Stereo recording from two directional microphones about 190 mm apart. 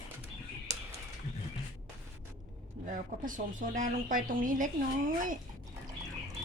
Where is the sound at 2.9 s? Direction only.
45° right (ahead or behind).